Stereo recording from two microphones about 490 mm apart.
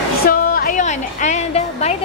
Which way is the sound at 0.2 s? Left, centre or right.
Centre.